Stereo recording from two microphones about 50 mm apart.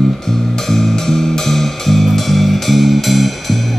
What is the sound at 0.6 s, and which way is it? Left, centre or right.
Music, centre.